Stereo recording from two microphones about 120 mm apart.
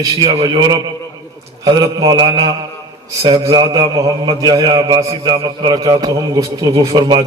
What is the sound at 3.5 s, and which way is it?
A man's voice, 40° right (ahead or behind).